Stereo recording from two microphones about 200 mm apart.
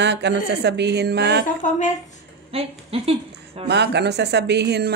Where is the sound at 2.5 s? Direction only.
30° right (ahead or behind).